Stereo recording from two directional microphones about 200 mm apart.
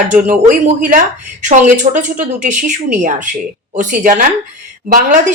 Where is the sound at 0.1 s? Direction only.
40° right (ahead or behind).